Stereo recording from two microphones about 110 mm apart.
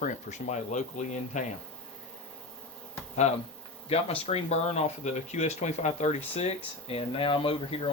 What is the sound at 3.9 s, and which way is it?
Speech, 65° left (ahead or behind).